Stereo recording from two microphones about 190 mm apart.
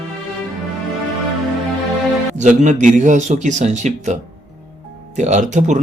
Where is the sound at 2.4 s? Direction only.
40° right (ahead or behind).